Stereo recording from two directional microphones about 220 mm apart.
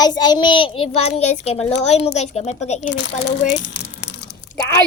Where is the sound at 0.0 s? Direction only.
20° left (ahead or behind).